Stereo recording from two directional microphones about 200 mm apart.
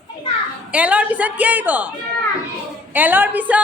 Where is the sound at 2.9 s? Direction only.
10° right (ahead or behind).